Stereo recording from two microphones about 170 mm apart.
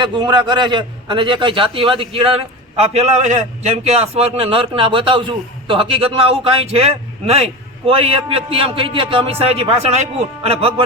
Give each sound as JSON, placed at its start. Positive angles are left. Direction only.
{"t": 0.0, "sound": "a man's voice", "side_deg": -25}